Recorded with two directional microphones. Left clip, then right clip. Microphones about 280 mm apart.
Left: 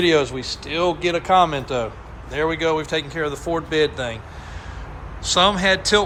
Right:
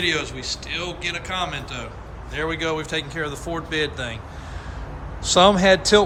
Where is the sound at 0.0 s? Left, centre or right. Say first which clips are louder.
Left 5 dB; centre.